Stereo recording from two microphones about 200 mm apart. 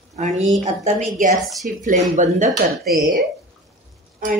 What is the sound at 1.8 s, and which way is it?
A woman's voice, 40° right (ahead or behind).